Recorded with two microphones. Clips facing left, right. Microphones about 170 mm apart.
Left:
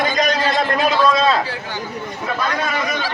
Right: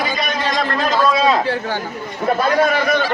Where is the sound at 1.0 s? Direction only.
10° right (ahead or behind).